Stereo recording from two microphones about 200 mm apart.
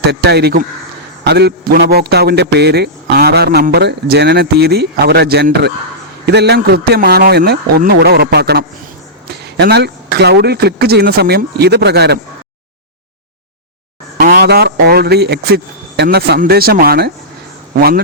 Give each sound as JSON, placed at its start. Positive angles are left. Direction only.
{"t": 0.1, "sound": "a man's voice", "side_deg": -55}
{"t": 14.2, "sound": "speech", "side_deg": -45}